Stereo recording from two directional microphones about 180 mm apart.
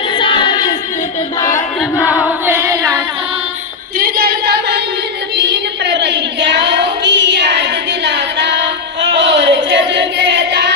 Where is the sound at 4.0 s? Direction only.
60° right (ahead or behind).